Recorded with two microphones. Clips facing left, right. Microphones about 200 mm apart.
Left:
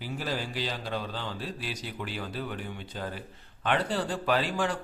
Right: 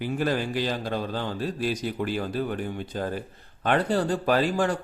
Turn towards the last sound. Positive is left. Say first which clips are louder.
# right 5 dB
turn(degrees=-45)  # may be behind; listen again after turning